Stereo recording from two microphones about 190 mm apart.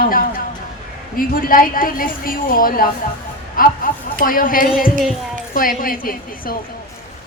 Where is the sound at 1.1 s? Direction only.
50° left (ahead or behind).